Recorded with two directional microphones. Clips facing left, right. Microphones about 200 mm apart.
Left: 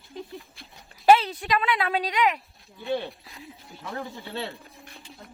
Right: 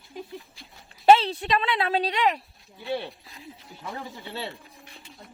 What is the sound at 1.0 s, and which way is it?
A woman's voice, 25° right (ahead or behind).